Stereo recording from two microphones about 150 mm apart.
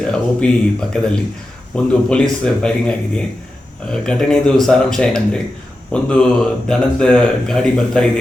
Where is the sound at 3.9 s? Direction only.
5° left (ahead or behind).